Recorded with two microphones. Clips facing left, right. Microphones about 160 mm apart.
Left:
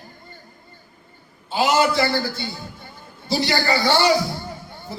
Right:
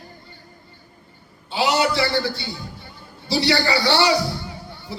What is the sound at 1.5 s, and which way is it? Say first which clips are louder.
A man's voice: left 2 dB; 45° left (ahead or behind).